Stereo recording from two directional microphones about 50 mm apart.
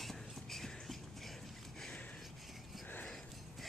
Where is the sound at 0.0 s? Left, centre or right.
Centre.